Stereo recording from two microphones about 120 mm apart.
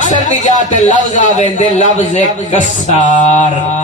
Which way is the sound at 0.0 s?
90° left.